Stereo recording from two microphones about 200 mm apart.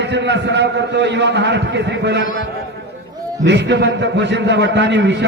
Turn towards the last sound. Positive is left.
turn(degrees=-60)  # may be behind; listen again after turning